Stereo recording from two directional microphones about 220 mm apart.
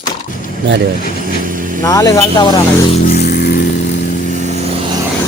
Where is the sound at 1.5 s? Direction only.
40° right (ahead or behind).